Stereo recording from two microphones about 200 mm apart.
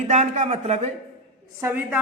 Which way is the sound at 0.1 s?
35° right (ahead or behind).